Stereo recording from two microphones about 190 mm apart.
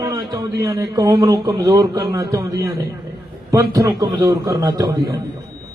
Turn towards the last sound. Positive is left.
turn(degrees=-20)  # may be behind; listen again after turning